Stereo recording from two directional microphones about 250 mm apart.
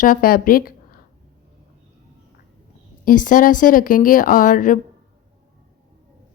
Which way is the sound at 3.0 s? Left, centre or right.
Left.